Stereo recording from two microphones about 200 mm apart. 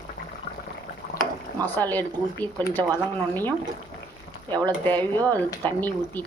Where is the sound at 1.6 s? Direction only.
10° left (ahead or behind).